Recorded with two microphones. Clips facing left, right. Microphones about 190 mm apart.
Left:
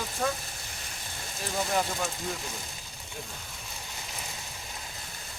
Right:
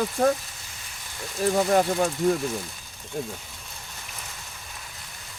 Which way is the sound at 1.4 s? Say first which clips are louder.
Right 9 dB; 50° right (ahead or behind).